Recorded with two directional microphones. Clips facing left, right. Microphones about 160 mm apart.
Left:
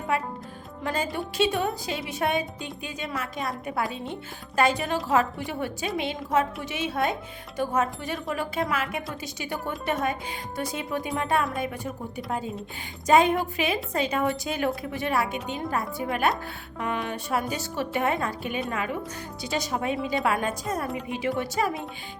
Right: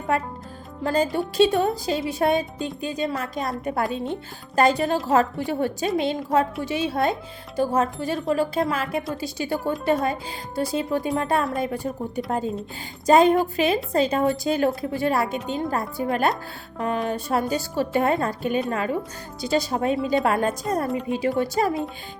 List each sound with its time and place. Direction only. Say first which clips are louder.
0.9 s speech: right 7 dB; 35° right (ahead or behind)
13.1 s speech: right 4 dB; 35° right (ahead or behind)